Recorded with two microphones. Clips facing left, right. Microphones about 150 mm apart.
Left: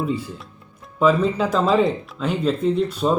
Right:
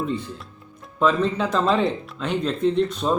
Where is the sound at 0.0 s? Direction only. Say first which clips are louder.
Left 2 dB; 5° left (ahead or behind).